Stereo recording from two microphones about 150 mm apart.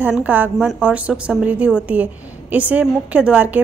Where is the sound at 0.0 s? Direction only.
10° right (ahead or behind).